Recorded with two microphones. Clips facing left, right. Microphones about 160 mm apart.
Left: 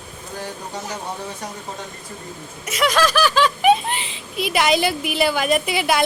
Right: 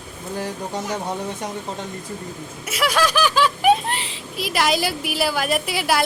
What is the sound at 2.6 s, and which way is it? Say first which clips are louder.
A woman's voice: left 2 dB; 5° right (ahead or behind).